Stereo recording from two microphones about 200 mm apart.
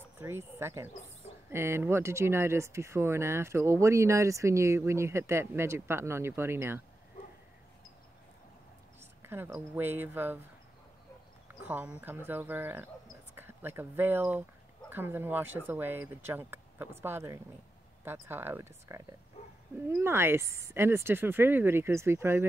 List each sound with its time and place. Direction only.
0.2 s speech: 15° right (ahead or behind)
9.2 s speech: 10° right (ahead or behind)
11.4 s speech: 10° right (ahead or behind)
19.4 s dog: 30° left (ahead or behind)
19.9 s speech: 10° right (ahead or behind)